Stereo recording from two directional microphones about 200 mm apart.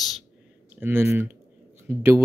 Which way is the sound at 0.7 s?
10° right (ahead or behind).